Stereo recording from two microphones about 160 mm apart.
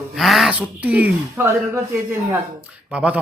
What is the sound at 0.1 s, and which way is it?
Speech, centre (ahead or behind).